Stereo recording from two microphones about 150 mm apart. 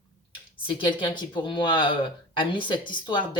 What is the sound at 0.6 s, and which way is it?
Speech, 35° left (ahead or behind).